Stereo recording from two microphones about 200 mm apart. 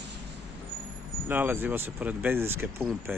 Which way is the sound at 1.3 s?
10° right (ahead or behind).